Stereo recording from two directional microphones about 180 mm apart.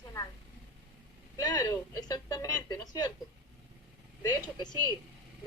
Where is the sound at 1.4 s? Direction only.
20° left (ahead or behind).